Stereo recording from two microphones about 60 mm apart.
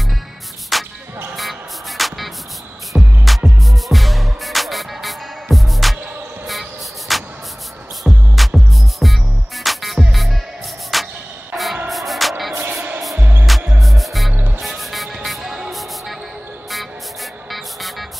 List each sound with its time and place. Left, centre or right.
0.7 s music: centre
6.4 s a sound: centre
8.0 s music: centre
13.2 s music: right
13.7 s music: centre